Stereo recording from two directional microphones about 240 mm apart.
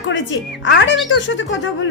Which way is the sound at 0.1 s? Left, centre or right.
Left.